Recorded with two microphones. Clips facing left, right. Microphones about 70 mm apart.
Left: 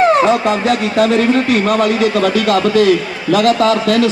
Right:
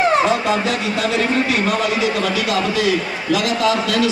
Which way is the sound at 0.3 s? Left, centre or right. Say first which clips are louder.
Left 5 dB; left.